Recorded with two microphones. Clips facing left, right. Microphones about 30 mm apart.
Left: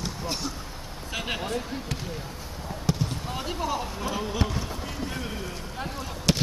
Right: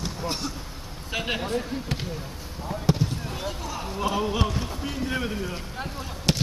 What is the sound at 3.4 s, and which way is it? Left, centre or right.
Speech, centre.